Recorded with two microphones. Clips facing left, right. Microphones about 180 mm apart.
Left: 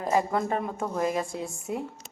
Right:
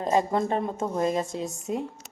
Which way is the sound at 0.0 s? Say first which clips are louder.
Right 2 dB; 25° right (ahead or behind).